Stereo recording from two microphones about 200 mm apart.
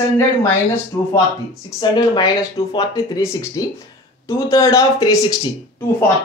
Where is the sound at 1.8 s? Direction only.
20° left (ahead or behind).